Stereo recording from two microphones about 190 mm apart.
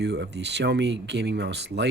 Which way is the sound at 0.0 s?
60° right (ahead or behind).